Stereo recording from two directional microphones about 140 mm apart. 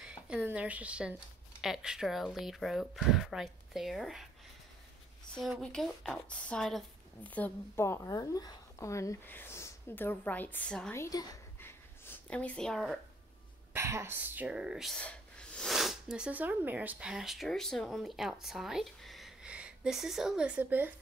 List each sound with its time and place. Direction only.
0.0 s a woman's voice: 10° right (ahead or behind)
5.3 s a woman's voice: 5° left (ahead or behind)
11.0 s a woman's voice: 25° left (ahead or behind)
11.6 s a sound: 10° left (ahead or behind)
13.7 s speech: 20° right (ahead or behind)
15.0 s speech: 10° left (ahead or behind); by 20.9 s 10° right (ahead or behind)